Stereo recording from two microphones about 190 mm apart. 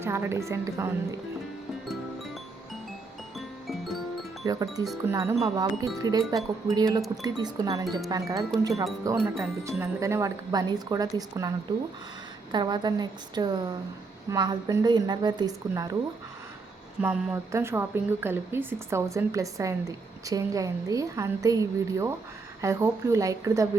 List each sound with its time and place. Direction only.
0.0 s a woman's voice: 15° right (ahead or behind)
3.3 s music: centre (ahead or behind)
4.4 s a woman's voice: 20° right (ahead or behind)
9.2 s speech: centre (ahead or behind)
9.6 s speech: 15° right (ahead or behind)
17.0 s a woman's voice: 5° right (ahead or behind)